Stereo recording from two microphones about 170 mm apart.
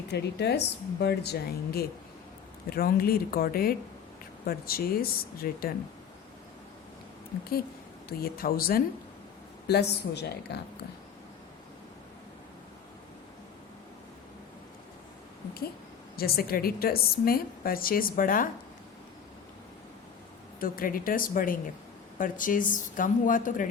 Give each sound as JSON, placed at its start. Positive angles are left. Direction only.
{"t": 0.1, "sound": "a woman's voice", "side_deg": 80}
{"t": 8.2, "sound": "a woman's voice", "side_deg": 60}
{"t": 9.6, "sound": "a woman's voice", "side_deg": 75}
{"t": 16.1, "sound": "a woman's voice", "side_deg": 65}
{"t": 20.6, "sound": "a woman's voice", "side_deg": 55}